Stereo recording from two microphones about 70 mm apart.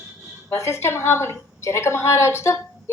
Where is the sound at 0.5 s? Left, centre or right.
Left.